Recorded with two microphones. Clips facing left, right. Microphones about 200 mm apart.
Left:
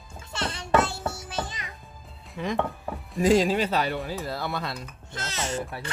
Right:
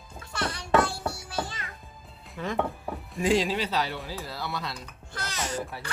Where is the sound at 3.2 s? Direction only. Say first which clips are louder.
Left 4 dB; 45° left (ahead or behind).